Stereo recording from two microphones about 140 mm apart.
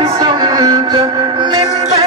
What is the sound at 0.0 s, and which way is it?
Music, 30° right (ahead or behind).